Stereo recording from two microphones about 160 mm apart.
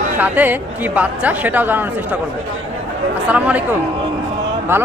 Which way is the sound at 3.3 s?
10° right (ahead or behind).